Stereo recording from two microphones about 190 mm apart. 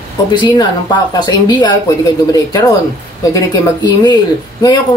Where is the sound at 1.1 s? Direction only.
20° left (ahead or behind).